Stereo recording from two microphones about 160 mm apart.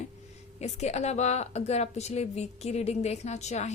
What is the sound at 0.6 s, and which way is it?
A woman's voice, 45° left (ahead or behind).